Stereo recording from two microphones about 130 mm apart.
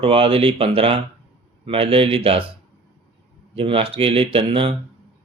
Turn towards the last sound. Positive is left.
turn(degrees=-45)  # may be behind; listen again after turning